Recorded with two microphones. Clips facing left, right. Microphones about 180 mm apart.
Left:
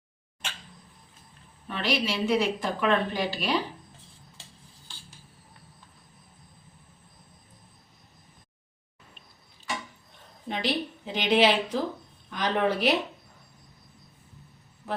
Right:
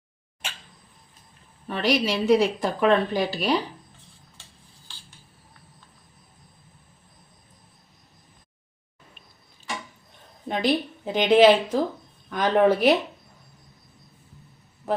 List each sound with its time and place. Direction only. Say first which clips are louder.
1.6 s a woman's voice: right 5 dB; 40° right (ahead or behind)
10.5 s a woman's voice: right 5 dB; 50° right (ahead or behind)
14.8 s a sound: right 7 dB; 45° right (ahead or behind)